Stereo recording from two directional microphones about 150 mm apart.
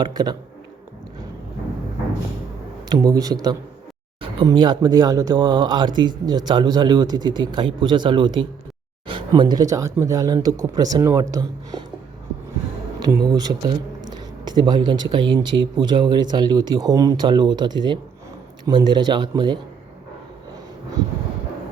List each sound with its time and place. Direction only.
0.0 s speech: 25° right (ahead or behind)
2.9 s speech: 25° right (ahead or behind)
13.0 s speech: 25° right (ahead or behind)